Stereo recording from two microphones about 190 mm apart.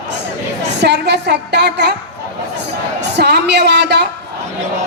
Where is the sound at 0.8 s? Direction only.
60° right (ahead or behind).